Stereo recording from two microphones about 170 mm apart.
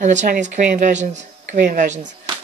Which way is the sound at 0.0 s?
45° right (ahead or behind).